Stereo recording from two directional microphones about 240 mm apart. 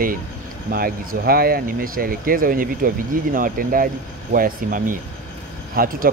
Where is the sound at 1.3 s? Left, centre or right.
Right.